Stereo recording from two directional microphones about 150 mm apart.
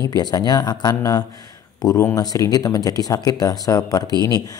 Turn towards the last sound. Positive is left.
turn(degrees=25)  # may be behind; listen again after turning